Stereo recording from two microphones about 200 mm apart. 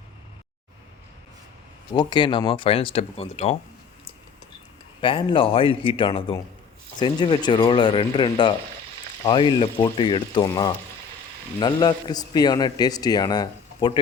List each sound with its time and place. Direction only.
1.9 s a man's voice: 20° left (ahead or behind)
4.9 s a man's voice: 25° left (ahead or behind)